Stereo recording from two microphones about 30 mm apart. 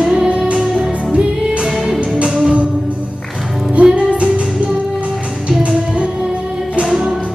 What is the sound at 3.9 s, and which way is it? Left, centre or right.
Music, right.